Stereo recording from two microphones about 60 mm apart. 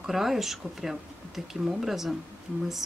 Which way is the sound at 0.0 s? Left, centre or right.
Centre.